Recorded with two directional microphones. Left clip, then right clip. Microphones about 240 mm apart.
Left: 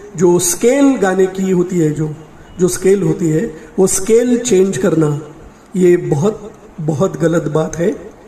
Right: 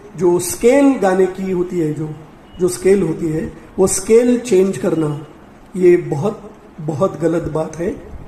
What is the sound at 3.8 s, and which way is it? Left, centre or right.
Speech, left.